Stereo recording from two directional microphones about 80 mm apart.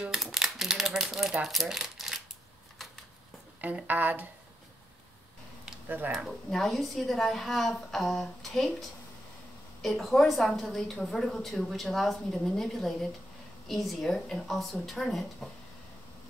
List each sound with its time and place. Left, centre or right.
0.0 s crumpling: centre
1.3 s speech: centre
3.6 s speech: right
5.9 s speech: right
6.1 s a woman's voice: centre
9.8 s a woman's voice: centre